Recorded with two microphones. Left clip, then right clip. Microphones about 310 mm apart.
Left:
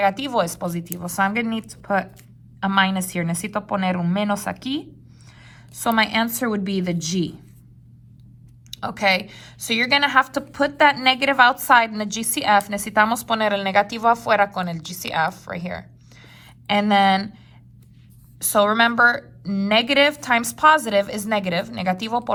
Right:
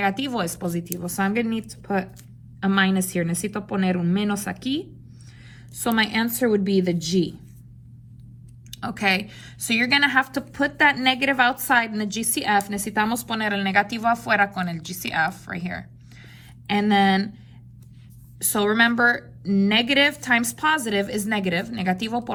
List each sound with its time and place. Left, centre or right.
0.0 s a woman's voice: centre
8.7 s a woman's voice: centre
18.3 s a woman's voice: centre